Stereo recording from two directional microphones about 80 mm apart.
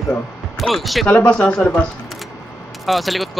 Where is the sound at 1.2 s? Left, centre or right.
Centre.